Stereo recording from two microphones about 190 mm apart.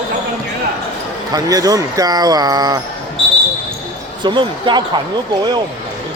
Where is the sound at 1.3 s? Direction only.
20° right (ahead or behind).